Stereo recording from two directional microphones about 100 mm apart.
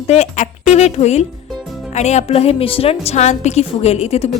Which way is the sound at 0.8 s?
90° left.